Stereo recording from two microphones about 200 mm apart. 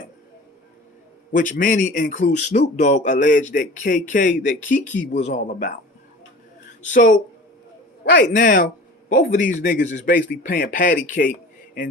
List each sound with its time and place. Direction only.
1.3 s a man's voice: 40° left (ahead or behind)
6.8 s a man's voice: 40° left (ahead or behind)
8.3 s a man's voice: 45° left (ahead or behind)